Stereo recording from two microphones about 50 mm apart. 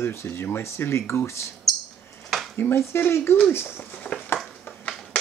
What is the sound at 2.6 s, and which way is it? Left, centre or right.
Speech, left.